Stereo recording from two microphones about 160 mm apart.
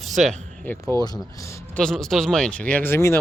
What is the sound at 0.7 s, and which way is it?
Speech, 10° left (ahead or behind).